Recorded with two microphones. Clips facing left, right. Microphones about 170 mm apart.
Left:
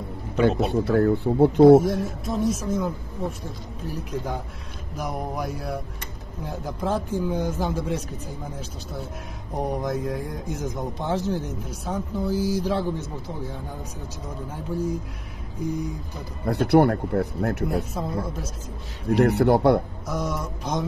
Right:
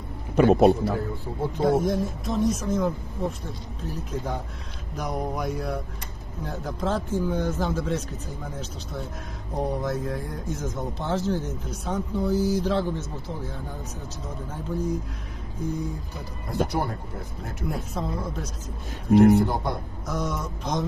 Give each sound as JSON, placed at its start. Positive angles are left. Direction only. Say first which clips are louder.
{"t": 0.4, "sound": "a man's voice", "louder": "right 4 dB", "side_deg": -60}
{"t": 0.8, "sound": "speech", "louder": "left 8 dB", "side_deg": 65}
{"t": 2.2, "sound": "speech", "louder": "even", "side_deg": 5}
{"t": 9.6, "sound": "speech", "louder": "left 1 dB", "side_deg": 15}
{"t": 15.6, "sound": "speech", "louder": "left 2 dB", "side_deg": 10}
{"t": 16.4, "sound": "speech", "louder": "left 9 dB", "side_deg": 65}
{"t": 17.9, "sound": "speech", "louder": "left 1 dB", "side_deg": 5}
{"t": 19.1, "sound": "speech", "louder": "right 1 dB", "side_deg": 65}
{"t": 20.1, "sound": "speech", "louder": "even", "side_deg": 5}